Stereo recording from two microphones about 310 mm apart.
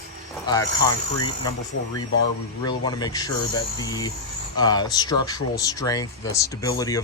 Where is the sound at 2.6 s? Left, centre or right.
Centre.